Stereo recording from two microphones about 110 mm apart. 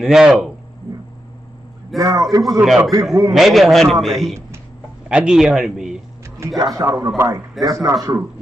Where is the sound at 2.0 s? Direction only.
30° right (ahead or behind).